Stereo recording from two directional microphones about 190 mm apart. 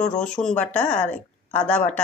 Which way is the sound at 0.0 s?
5° left (ahead or behind).